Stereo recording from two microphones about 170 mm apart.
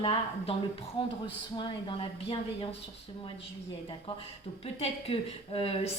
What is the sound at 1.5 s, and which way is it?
Speech, 30° left (ahead or behind).